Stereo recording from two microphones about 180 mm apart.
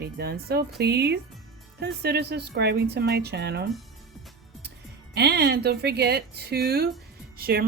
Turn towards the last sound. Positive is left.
turn(degrees=-55)  # may be behind; listen again after turning